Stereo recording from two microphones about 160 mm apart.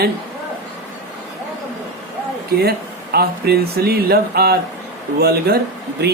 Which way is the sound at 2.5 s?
75° right (ahead or behind).